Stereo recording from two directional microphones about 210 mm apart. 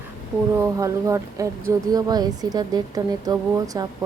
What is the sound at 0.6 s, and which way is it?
A woman's voice, 15° right (ahead or behind).